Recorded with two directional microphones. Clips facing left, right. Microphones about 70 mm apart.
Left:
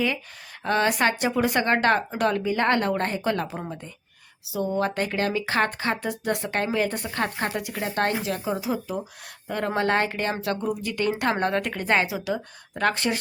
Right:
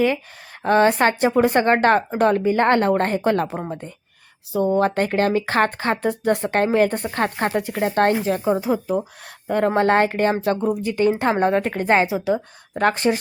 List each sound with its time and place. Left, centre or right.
0.6 s speech: right